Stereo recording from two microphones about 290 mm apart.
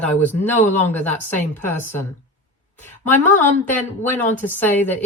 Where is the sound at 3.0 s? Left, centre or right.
Centre.